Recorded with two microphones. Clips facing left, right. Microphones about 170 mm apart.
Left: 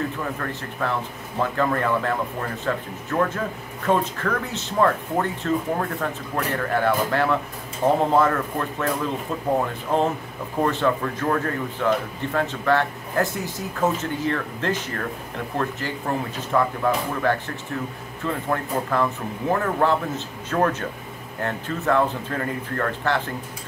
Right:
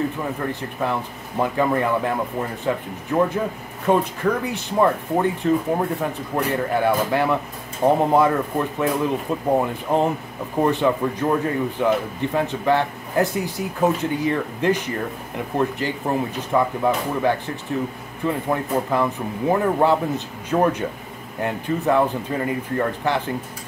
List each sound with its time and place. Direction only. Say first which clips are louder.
0.4 s speech: right 3 dB; 15° right (ahead or behind)